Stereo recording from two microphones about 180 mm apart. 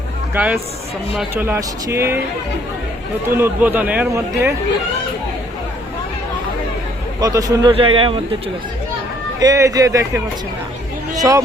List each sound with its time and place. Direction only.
0.3 s speech: 10° right (ahead or behind)
3.2 s speech: 10° right (ahead or behind)
7.2 s a man's voice: 20° right (ahead or behind)
9.4 s a man's voice: 20° right (ahead or behind)
11.1 s a sound: 20° right (ahead or behind)